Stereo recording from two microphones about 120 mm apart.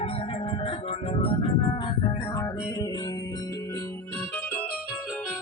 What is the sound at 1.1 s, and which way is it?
Music, 50° left (ahead or behind).